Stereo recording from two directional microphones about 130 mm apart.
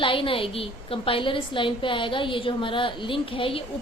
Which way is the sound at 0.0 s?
40° left (ahead or behind).